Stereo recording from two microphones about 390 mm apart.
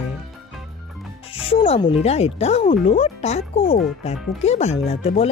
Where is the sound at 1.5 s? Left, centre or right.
Centre.